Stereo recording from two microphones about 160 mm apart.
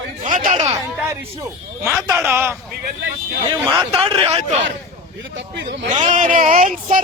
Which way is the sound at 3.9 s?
40° right (ahead or behind).